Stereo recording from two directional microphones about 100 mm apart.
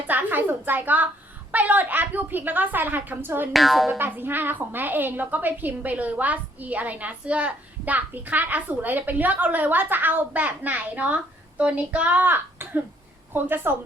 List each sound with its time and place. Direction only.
0.1 s a sound: 20° right (ahead or behind)
1.5 s a woman's voice: 15° right (ahead or behind)
3.5 s speech: centre (ahead or behind)
3.9 s a woman's voice: 20° right (ahead or behind)